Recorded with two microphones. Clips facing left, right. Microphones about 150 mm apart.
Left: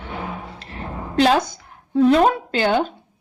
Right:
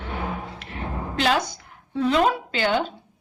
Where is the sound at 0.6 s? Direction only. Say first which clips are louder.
Even; 35° left (ahead or behind).